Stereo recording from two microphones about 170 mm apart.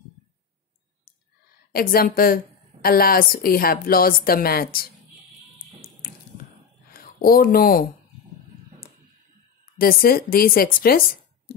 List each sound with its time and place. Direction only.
1.7 s a woman's voice: 60° left (ahead or behind)
6.9 s a sound: 60° left (ahead or behind)
9.8 s a woman's voice: 60° left (ahead or behind)